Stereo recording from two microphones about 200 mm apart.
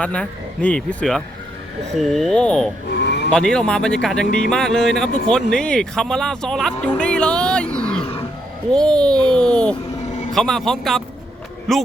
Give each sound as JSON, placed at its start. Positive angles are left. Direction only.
{"t": 0.0, "sound": "speech", "side_deg": 5}
{"t": 2.9, "sound": "a sound", "side_deg": 60}
{"t": 3.2, "sound": "speech", "side_deg": 5}